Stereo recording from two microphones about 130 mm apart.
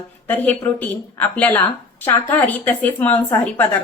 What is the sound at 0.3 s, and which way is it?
A woman's voice, 15° left (ahead or behind).